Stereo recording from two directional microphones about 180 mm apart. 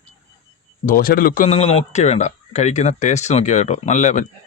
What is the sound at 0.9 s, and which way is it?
A man's voice, 55° left (ahead or behind).